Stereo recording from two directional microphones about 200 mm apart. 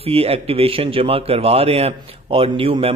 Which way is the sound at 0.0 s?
30° right (ahead or behind).